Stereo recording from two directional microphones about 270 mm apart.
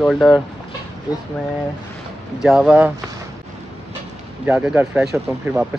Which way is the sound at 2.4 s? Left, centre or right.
Centre.